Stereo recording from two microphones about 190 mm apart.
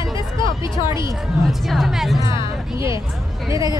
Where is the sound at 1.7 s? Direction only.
Centre (ahead or behind).